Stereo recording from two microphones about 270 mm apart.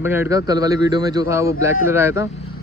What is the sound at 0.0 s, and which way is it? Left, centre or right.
A man's voice, centre.